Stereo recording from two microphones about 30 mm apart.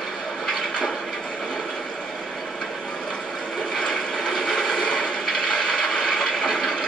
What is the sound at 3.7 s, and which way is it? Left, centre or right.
Mechanisms, left.